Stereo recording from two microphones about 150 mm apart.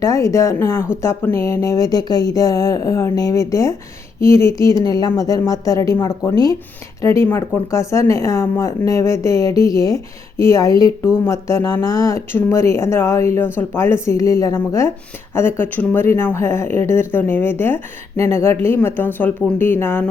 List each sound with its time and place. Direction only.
0.0 s speech: 20° left (ahead or behind)